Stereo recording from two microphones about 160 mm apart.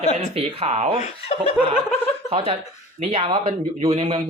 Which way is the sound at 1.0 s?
45° left (ahead or behind).